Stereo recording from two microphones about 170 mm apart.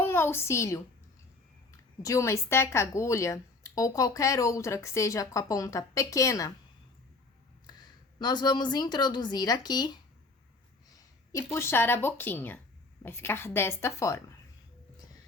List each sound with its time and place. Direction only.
0.0 s a child's voice: 15° left (ahead or behind)
8.2 s speech: 25° left (ahead or behind)
10.8 s a sound: 20° left (ahead or behind)
11.5 s speech: 15° left (ahead or behind)